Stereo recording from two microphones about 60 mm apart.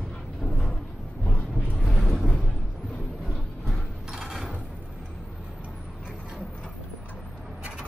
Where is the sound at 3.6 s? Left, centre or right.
Centre.